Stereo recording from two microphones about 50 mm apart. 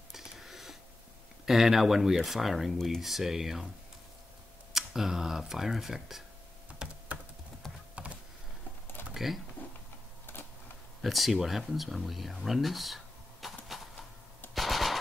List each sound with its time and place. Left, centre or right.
0.1 s a sound: centre
1.4 s speech: centre
4.7 s speech: centre
6.8 s computer keyboard: centre
7.6 s typing: centre
9.1 s speech: centre
11.0 s speech: centre
14.5 s machine gun: centre